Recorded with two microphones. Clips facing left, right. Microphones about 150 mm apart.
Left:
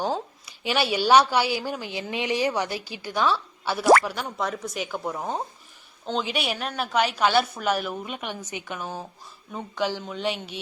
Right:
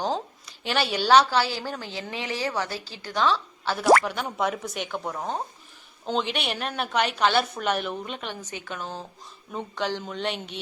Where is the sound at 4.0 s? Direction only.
Centre (ahead or behind).